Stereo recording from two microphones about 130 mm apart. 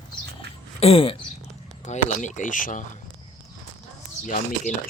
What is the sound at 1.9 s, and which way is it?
Speech, 70° left (ahead or behind).